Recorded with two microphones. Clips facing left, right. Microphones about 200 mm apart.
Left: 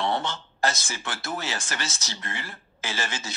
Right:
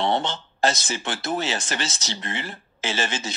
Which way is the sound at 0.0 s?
20° right (ahead or behind).